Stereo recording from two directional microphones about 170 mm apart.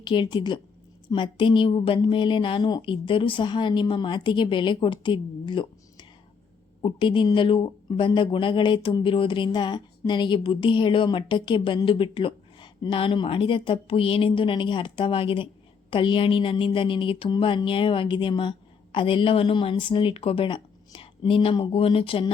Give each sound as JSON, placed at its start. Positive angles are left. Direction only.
{"t": 0.0, "sound": "speech", "side_deg": 30}